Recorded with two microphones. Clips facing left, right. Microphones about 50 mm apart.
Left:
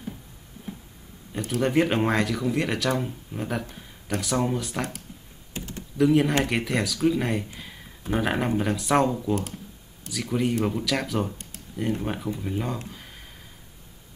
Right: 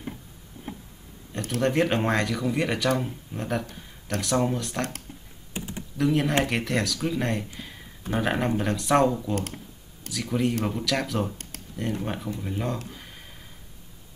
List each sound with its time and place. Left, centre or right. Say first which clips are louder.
1.6 s speech: left 1 dB; centre
5.5 s computer keyboard: right 1 dB; centre
5.9 s speech: left 3 dB; centre